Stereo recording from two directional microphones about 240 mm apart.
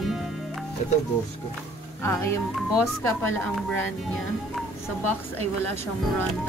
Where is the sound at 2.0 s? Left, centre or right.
Centre.